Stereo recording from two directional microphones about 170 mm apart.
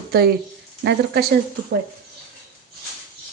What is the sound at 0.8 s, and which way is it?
Speech, 80° right.